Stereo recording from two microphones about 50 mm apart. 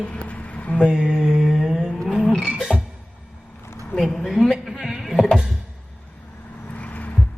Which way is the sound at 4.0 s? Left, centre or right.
Centre.